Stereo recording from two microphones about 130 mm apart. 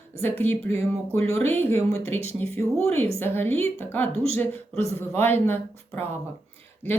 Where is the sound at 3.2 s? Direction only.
15° left (ahead or behind).